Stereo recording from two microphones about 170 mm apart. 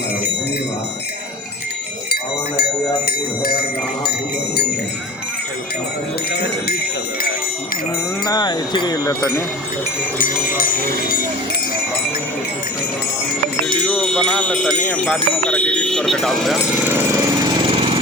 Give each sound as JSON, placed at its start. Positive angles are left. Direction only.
{"t": 2.6, "sound": "jingle bell", "side_deg": 65}
{"t": 6.3, "sound": "a sound", "side_deg": 75}
{"t": 8.2, "sound": "wind chime", "side_deg": 25}
{"t": 10.2, "sound": "speech", "side_deg": 55}
{"t": 13.8, "sound": "music", "side_deg": 5}
{"t": 14.8, "sound": "speech", "side_deg": 5}
{"t": 17.6, "sound": "jackhammer", "side_deg": -30}